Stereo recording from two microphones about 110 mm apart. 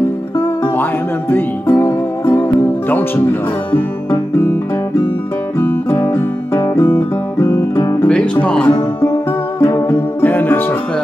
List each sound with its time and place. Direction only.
1.3 s music: 20° left (ahead or behind)
5.6 s guitar: 20° left (ahead or behind)
8.0 s speech: 10° left (ahead or behind)
9.6 s music: 20° left (ahead or behind)